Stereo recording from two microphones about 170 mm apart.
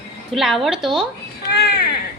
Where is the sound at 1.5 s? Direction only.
70° left (ahead or behind).